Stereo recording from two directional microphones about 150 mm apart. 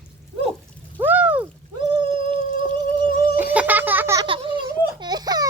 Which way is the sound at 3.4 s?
10° right (ahead or behind).